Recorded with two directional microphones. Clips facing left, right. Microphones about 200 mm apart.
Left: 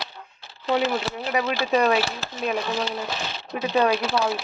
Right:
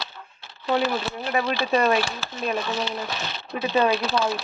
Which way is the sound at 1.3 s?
10° left (ahead or behind).